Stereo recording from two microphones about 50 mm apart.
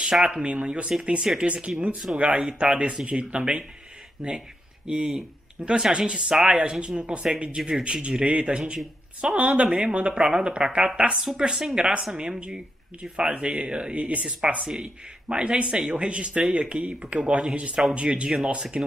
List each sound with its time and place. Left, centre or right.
0.3 s speech: right
4.2 s speech: centre
13.3 s speech: right